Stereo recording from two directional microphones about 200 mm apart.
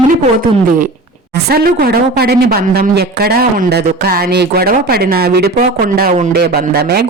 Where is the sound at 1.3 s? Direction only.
50° right (ahead or behind).